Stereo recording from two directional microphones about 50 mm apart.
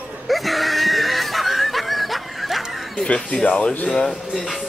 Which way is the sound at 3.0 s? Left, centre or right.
Centre.